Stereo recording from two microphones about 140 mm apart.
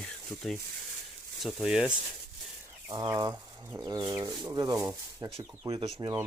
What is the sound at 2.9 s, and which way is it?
Speech, 25° right (ahead or behind).